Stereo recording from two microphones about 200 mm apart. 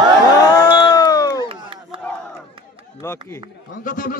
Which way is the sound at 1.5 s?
25° right (ahead or behind).